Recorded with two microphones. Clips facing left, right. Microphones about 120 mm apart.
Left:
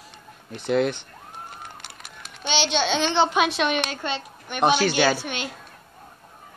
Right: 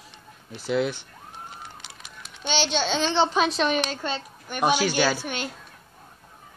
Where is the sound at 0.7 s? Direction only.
55° left (ahead or behind).